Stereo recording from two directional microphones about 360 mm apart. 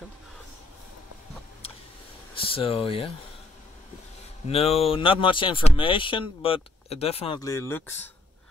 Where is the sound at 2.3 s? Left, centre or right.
Centre.